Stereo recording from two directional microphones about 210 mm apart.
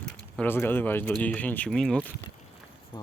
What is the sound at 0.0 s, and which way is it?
Speech, 10° left (ahead or behind).